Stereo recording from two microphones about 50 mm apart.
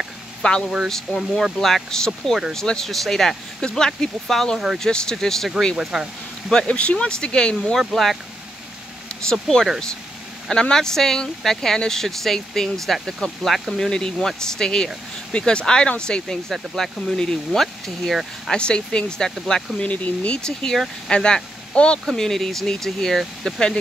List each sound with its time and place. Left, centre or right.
0.4 s speech: centre
5.8 s speech: centre
6.5 s speech: left
7.8 s speech: centre
9.3 s speech: centre
13.8 s speech: centre
18.5 s speech: centre
19.8 s speech: left
20.3 s speech: centre
22.0 s speech: centre